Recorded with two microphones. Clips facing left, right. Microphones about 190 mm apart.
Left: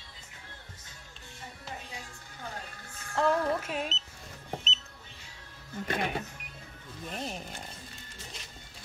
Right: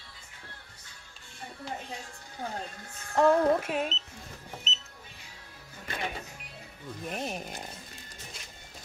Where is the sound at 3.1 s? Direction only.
45° right (ahead or behind).